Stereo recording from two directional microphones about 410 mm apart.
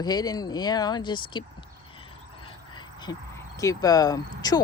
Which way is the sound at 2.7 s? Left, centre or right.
Centre.